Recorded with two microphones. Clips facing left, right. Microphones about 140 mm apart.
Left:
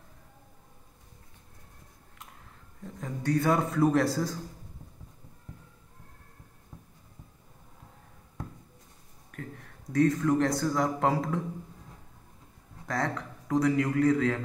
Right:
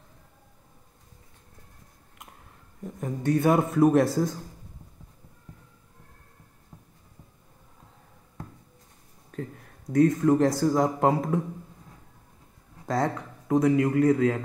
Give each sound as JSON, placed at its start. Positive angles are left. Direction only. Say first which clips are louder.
{"t": 2.8, "sound": "a man's voice", "louder": "right 5 dB", "side_deg": -20}
{"t": 10.1, "sound": "a man's voice", "louder": "right 4 dB", "side_deg": -25}
{"t": 12.8, "sound": "a man's voice", "louder": "right 5 dB", "side_deg": -20}